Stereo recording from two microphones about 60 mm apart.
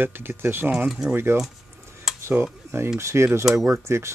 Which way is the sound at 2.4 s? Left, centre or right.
Right.